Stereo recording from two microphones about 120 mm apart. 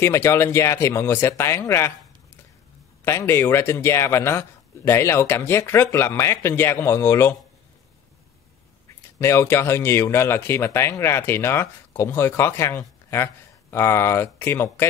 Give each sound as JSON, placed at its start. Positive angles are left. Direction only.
{"t": 0.0, "sound": "speech", "side_deg": 20}
{"t": 3.1, "sound": "speech", "side_deg": 20}
{"t": 9.2, "sound": "speech", "side_deg": 20}